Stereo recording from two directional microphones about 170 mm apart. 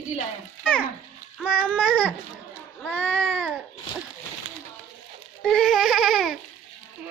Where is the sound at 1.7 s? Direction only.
5° left (ahead or behind).